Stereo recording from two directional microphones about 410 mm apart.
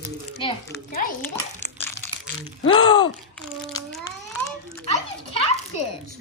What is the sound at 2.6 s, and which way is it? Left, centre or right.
Speech, centre.